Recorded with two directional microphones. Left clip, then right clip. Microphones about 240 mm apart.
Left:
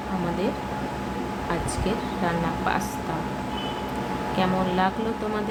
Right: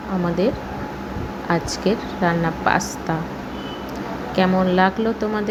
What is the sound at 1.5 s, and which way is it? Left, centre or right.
A woman's voice, right.